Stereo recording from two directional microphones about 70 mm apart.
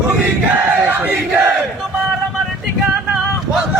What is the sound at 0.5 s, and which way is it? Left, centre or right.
Battle cry, right.